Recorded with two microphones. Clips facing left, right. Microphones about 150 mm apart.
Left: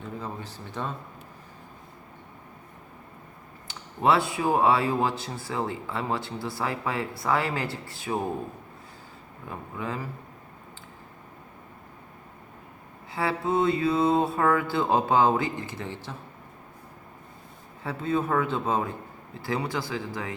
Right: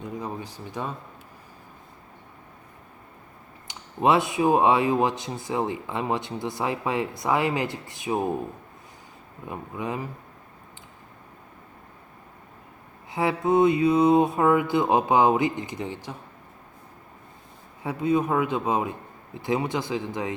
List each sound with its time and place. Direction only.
0.0 s a sound: 15° right (ahead or behind)
3.7 s speech: 20° right (ahead or behind)
9.5 s speech: 20° right (ahead or behind)
13.1 s mantra: 20° right (ahead or behind)
17.8 s mantra: 15° right (ahead or behind)
19.4 s speech: 20° right (ahead or behind)